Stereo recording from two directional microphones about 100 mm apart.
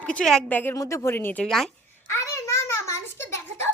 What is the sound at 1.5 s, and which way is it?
Speech, centre (ahead or behind).